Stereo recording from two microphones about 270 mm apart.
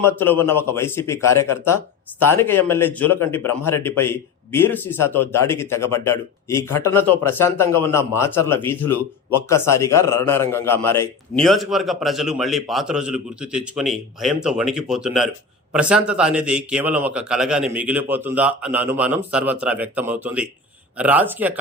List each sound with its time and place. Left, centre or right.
0.0 s a man's voice: centre